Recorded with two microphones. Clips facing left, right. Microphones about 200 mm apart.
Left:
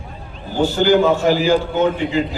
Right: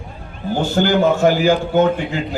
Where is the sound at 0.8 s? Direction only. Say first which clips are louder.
Even; 50° right (ahead or behind).